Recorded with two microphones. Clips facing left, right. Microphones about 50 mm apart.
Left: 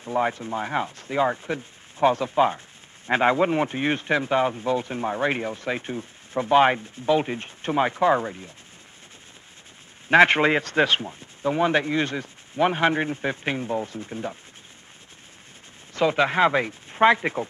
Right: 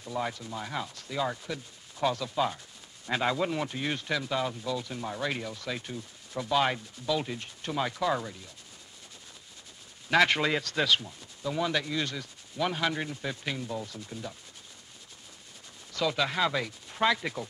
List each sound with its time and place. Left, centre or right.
0.0 s speech: left
10.0 s speech: left
15.9 s speech: left